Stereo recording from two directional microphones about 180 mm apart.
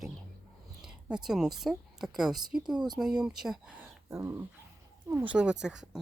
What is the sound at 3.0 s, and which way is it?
Speech, 5° right (ahead or behind).